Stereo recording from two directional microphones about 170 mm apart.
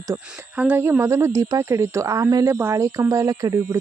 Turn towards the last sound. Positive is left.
turn(degrees=-20)  # may be behind; listen again after turning